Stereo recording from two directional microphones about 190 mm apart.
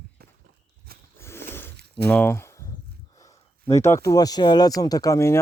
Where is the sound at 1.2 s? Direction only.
10° left (ahead or behind).